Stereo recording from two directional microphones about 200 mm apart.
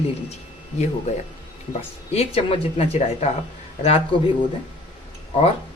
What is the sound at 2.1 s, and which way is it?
Speech, 30° left (ahead or behind).